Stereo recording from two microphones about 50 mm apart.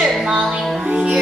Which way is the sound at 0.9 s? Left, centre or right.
Right.